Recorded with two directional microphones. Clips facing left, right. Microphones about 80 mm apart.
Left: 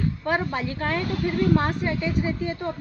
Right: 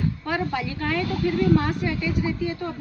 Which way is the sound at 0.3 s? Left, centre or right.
Left.